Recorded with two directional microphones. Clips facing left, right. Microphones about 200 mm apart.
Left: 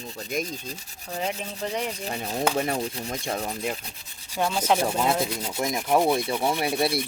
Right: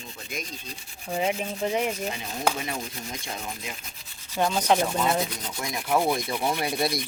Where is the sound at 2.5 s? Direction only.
35° left (ahead or behind).